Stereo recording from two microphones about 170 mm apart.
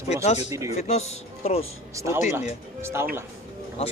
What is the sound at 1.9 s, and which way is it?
A man's voice, 15° right (ahead or behind).